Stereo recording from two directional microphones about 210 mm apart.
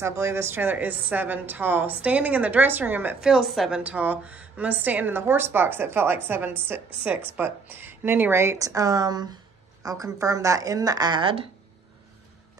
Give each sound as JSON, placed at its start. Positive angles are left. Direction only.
{"t": 0.0, "sound": "a woman's voice", "side_deg": -10}